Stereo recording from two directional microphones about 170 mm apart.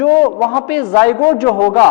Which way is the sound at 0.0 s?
10° left (ahead or behind).